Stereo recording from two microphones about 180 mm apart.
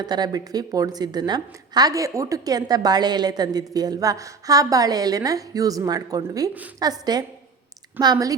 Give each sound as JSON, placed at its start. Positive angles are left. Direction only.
{"t": 0.0, "sound": "a woman's voice", "side_deg": -20}